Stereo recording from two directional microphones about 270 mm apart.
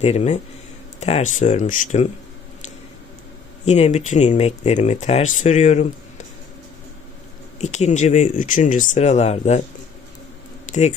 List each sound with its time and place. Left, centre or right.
0.0 s speech: left
3.7 s speech: left
7.6 s speech: left
10.7 s speech: left